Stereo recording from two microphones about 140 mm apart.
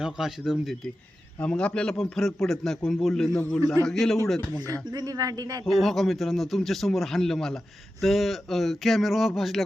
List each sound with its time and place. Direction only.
0.0 s a man's voice: 5° right (ahead or behind)
4.7 s speech: 25° right (ahead or behind)
5.8 s a man's voice: centre (ahead or behind)